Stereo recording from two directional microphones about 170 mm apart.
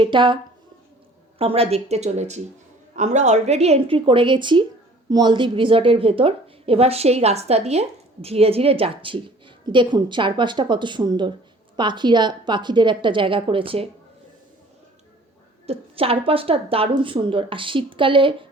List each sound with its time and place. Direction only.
0.0 s a woman's voice: 30° right (ahead or behind)
1.4 s a woman's voice: 35° right (ahead or behind)
15.6 s a woman's voice: 35° right (ahead or behind)